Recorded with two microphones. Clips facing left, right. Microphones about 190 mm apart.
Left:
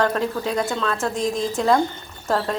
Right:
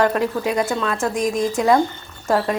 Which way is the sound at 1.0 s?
15° right (ahead or behind).